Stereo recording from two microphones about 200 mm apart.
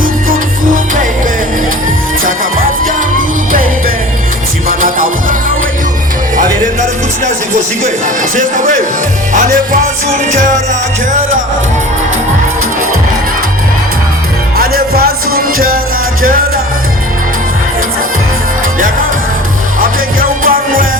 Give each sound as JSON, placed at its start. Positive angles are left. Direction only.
{"t": 2.2, "sound": "music", "side_deg": -45}
{"t": 8.4, "sound": "music", "side_deg": -40}
{"t": 14.5, "sound": "music", "side_deg": -50}
{"t": 19.8, "sound": "music", "side_deg": -45}